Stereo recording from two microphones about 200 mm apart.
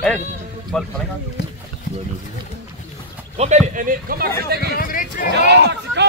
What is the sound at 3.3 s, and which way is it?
A man's voice, 35° right (ahead or behind).